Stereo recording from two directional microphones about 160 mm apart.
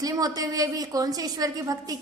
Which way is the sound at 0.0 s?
25° right (ahead or behind).